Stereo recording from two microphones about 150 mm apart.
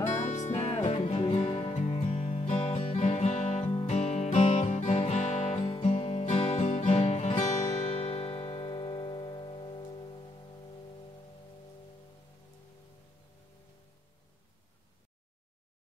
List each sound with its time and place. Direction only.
0.2 s music: 50° left (ahead or behind)
0.7 s music: 40° left (ahead or behind)